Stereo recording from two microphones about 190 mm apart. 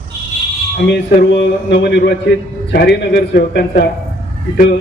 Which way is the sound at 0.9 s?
65° left (ahead or behind).